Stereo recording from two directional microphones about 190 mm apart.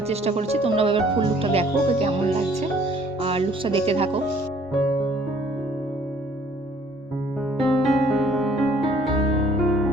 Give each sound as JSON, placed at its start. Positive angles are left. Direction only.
{"t": 0.1, "sound": "speech", "side_deg": -35}
{"t": 3.2, "sound": "music", "side_deg": -30}
{"t": 3.8, "sound": "speech", "side_deg": -30}
{"t": 7.6, "sound": "music", "side_deg": 0}